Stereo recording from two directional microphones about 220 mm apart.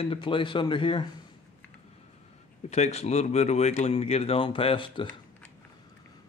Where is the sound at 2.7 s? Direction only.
30° left (ahead or behind).